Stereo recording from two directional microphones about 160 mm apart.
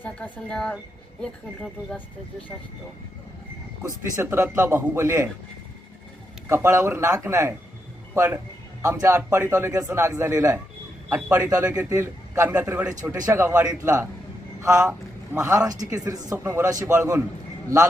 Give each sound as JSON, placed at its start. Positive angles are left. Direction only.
{"t": 0.0, "sound": "speech", "side_deg": 10}
{"t": 3.8, "sound": "a man's voice", "side_deg": -15}
{"t": 6.5, "sound": "a man's voice", "side_deg": -15}
{"t": 16.0, "sound": "speech", "side_deg": -25}
{"t": 16.3, "sound": "a man's voice", "side_deg": -15}